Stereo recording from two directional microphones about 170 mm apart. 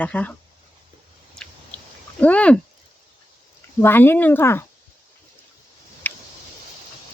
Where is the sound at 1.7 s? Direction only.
10° left (ahead or behind).